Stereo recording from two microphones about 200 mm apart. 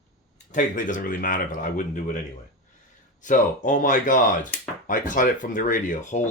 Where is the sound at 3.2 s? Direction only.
40° left (ahead or behind).